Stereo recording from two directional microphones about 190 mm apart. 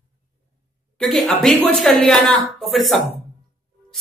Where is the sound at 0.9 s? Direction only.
Centre (ahead or behind).